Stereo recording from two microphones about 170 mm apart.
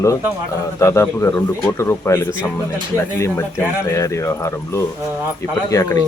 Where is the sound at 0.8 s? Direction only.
15° left (ahead or behind).